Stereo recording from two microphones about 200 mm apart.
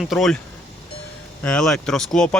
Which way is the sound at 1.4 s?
5° left (ahead or behind).